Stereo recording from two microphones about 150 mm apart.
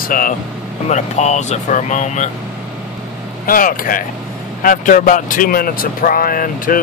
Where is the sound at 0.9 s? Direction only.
50° left (ahead or behind).